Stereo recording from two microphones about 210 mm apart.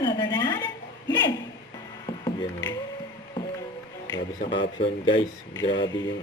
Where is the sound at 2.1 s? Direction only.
20° left (ahead or behind).